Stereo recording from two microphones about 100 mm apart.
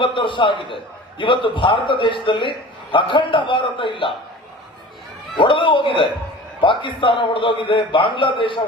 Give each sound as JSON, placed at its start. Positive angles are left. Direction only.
{"t": 0.0, "sound": "a man's voice", "side_deg": 55}
{"t": 5.4, "sound": "a man's voice", "side_deg": 55}